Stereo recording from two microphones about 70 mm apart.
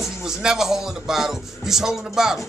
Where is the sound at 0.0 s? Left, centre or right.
Centre.